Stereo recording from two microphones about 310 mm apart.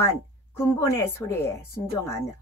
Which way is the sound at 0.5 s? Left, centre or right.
Centre.